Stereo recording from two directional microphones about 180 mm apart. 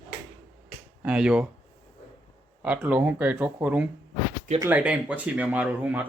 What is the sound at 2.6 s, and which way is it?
Speech, 5° right (ahead or behind).